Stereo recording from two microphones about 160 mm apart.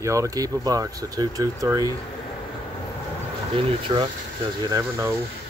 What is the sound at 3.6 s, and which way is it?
Speech, 35° right (ahead or behind).